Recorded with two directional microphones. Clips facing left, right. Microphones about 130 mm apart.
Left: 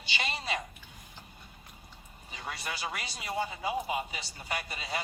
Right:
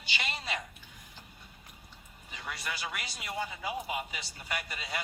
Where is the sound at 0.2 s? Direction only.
25° left (ahead or behind).